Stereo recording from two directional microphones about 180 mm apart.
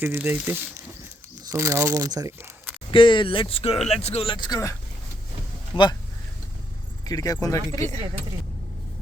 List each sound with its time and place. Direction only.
0.0 s speech: 10° right (ahead or behind)
2.9 s speech: 25° left (ahead or behind)
5.7 s speech: 25° left (ahead or behind)
7.0 s speech: 20° left (ahead or behind)